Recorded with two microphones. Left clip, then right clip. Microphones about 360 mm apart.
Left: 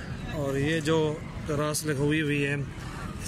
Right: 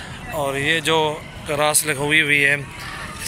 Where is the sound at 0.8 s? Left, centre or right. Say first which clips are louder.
Right 7 dB; centre.